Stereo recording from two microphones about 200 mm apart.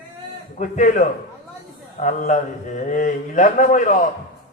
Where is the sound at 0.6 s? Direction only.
35° left (ahead or behind).